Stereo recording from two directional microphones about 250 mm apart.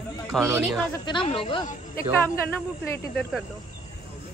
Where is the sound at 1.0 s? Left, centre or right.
Centre.